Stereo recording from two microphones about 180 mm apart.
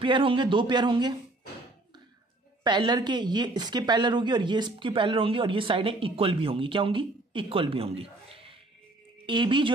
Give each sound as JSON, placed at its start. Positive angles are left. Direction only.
{"t": 0.0, "sound": "speech", "side_deg": -30}
{"t": 2.6, "sound": "a woman's voice", "side_deg": -25}